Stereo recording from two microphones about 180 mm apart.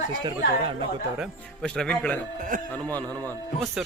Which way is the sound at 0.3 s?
30° right (ahead or behind).